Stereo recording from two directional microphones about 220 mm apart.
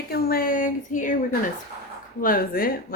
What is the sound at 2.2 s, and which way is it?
Speech, 40° left (ahead or behind).